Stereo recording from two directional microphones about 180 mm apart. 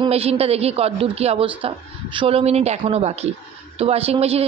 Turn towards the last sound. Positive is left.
turn(degrees=-35)  # may be behind; listen again after turning